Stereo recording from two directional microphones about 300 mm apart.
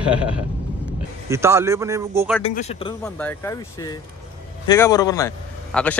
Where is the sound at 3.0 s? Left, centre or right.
Centre.